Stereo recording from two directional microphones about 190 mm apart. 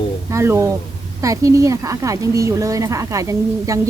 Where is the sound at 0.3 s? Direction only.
15° right (ahead or behind).